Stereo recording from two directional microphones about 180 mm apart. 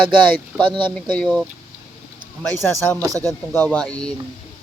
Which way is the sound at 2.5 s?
15° left (ahead or behind).